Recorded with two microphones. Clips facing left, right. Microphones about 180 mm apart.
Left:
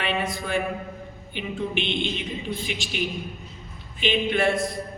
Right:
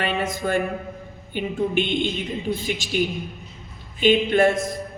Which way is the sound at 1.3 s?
45° right (ahead or behind).